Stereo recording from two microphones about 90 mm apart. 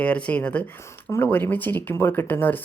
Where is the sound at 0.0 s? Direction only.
15° left (ahead or behind).